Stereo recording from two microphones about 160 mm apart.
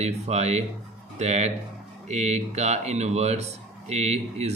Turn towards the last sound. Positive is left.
turn(degrees=-45)  # may be behind; listen again after turning